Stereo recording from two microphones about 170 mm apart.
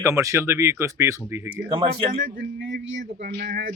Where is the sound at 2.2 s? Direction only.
65° right (ahead or behind).